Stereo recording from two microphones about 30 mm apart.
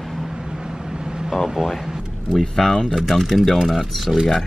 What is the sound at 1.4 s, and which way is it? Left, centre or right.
Speech, centre.